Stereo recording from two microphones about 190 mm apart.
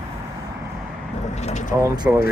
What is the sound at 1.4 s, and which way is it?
Vehicle, 40° left (ahead or behind).